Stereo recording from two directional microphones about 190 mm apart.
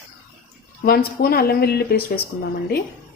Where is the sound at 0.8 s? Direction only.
55° left (ahead or behind).